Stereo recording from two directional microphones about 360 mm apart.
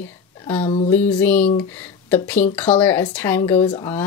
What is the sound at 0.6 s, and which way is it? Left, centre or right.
Speech, centre.